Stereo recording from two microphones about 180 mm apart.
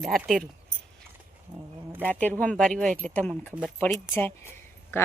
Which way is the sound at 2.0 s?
10° left (ahead or behind).